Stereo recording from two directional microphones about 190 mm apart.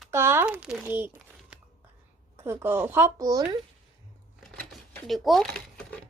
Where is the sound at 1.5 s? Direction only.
5° right (ahead or behind).